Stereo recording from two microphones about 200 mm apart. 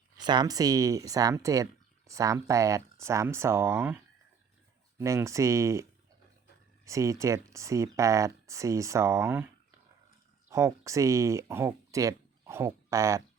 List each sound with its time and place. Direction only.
0.2 s speech: 20° right (ahead or behind)
4.9 s speech: 15° right (ahead or behind)
6.8 s speech: 15° right (ahead or behind)
10.5 s speech: 15° right (ahead or behind)